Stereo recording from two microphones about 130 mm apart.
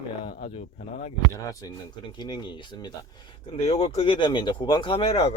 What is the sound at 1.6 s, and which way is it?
Speech, 30° left (ahead or behind).